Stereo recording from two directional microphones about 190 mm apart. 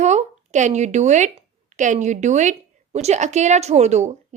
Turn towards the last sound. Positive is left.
turn(degrees=-35)  # may be behind; listen again after turning